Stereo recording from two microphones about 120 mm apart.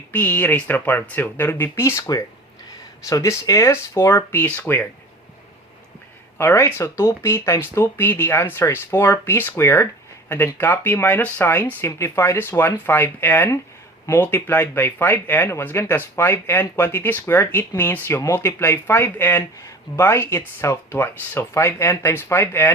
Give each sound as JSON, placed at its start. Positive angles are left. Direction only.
{"t": 0.1, "sound": "speech", "side_deg": 15}
{"t": 6.4, "sound": "speech", "side_deg": 20}